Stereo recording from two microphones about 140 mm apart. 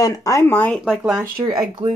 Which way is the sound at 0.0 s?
25° left (ahead or behind).